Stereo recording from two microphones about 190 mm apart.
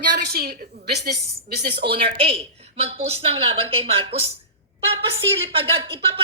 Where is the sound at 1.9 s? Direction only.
30° right (ahead or behind).